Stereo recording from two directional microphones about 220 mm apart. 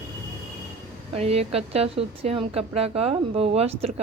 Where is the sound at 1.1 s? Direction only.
30° right (ahead or behind).